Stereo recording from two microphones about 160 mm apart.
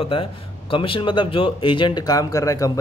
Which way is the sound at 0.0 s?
35° left (ahead or behind).